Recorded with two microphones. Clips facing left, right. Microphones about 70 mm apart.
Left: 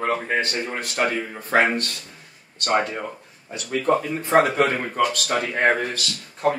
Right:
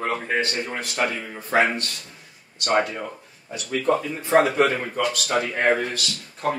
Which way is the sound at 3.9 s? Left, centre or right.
Left.